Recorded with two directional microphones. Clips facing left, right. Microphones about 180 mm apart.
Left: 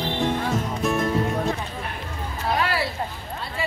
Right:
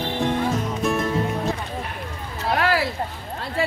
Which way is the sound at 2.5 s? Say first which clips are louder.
Right 4 dB; 85° right.